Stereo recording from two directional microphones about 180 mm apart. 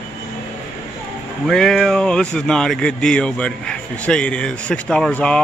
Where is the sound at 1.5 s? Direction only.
5° left (ahead or behind).